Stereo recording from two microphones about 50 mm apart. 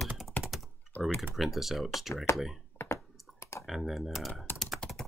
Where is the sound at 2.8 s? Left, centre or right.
Left.